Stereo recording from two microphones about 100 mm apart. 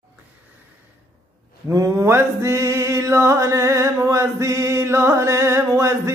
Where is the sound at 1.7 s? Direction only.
35° right (ahead or behind).